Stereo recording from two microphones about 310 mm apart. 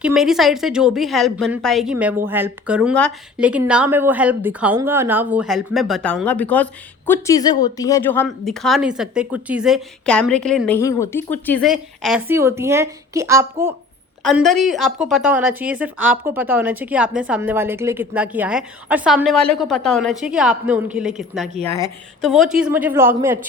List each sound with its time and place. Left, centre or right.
0.0 s a woman's voice: centre